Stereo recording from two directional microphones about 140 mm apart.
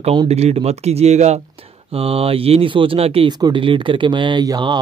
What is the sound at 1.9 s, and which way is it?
Speech, 40° right (ahead or behind).